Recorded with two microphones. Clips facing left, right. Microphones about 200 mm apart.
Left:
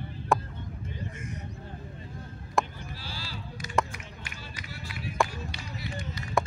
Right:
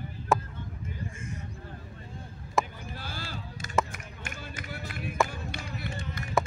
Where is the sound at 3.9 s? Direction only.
50° right (ahead or behind).